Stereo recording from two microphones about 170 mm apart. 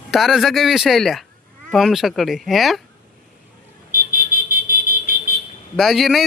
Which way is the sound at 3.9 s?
55° right (ahead or behind).